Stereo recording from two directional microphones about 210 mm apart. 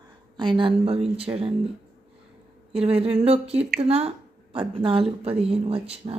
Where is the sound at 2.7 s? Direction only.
25° right (ahead or behind).